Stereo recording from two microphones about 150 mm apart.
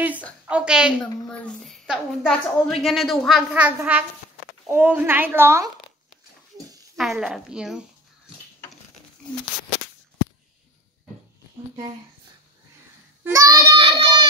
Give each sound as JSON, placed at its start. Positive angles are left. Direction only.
{"t": 0.5, "sound": "a woman's voice", "side_deg": -5}
{"t": 1.3, "sound": "a woman's voice", "side_deg": 5}
{"t": 7.0, "sound": "a woman's voice", "side_deg": 0}
{"t": 13.2, "sound": "child singing", "side_deg": -20}